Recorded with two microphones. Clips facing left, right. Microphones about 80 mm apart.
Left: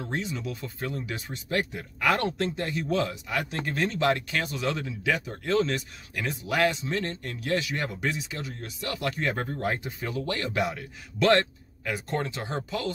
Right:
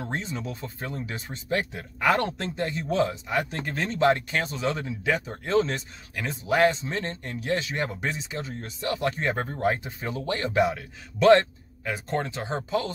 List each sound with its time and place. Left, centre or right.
0.0 s speech: right